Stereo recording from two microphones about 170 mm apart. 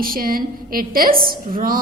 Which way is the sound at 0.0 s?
55° right (ahead or behind).